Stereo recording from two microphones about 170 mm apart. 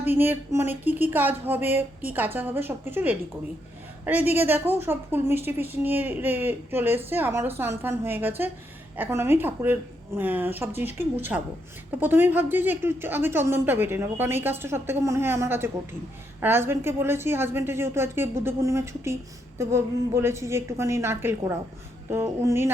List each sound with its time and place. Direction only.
0.0 s a woman's voice: 10° right (ahead or behind)